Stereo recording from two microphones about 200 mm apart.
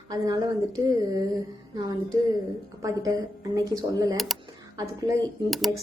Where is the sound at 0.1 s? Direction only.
20° right (ahead or behind).